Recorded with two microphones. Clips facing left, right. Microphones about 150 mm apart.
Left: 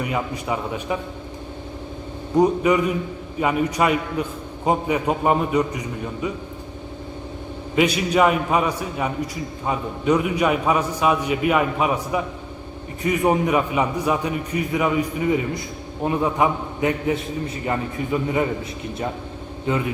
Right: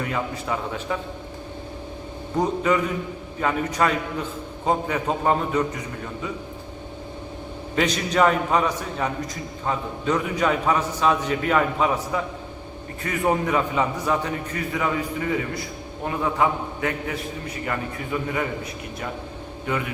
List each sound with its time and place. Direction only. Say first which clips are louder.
0.0 s a man's voice: left 2 dB; 15° left (ahead or behind)
2.3 s a man's voice: left 5 dB; 10° left (ahead or behind)
7.8 s a man's voice: left 3 dB; 10° left (ahead or behind)
19.6 s a man's voice: left 4 dB; 25° left (ahead or behind)